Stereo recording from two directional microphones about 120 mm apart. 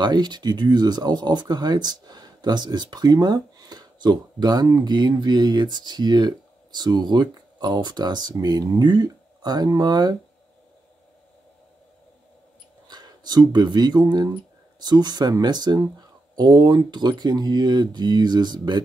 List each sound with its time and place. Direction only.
0.0 s speech: 35° right (ahead or behind)
12.8 s speech: 35° right (ahead or behind)